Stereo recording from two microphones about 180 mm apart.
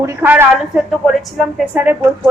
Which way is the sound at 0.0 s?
15° right (ahead or behind).